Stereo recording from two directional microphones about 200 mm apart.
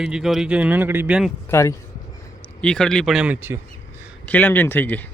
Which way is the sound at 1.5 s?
15° left (ahead or behind).